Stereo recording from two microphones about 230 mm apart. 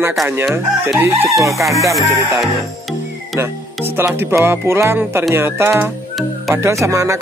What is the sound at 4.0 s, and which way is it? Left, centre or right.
Speech, centre.